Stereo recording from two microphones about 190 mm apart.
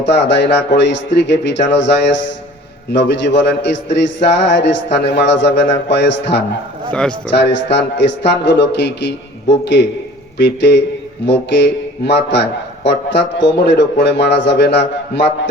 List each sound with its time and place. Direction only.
0.0 s a man's voice: 65° left (ahead or behind)